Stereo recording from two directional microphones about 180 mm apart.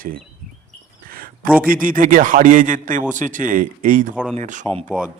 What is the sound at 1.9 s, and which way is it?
A man's voice, 50° right (ahead or behind).